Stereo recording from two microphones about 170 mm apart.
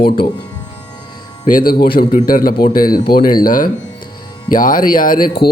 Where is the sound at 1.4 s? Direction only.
55° left (ahead or behind).